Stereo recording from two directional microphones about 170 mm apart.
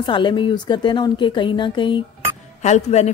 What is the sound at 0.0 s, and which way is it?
Speech, 30° left (ahead or behind).